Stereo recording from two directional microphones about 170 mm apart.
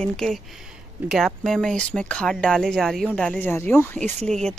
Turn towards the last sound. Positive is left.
turn(degrees=5)  # may be behind; listen again after turning